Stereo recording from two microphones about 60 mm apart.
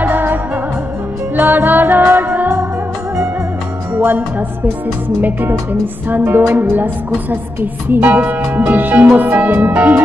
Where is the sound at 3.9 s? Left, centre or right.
Right.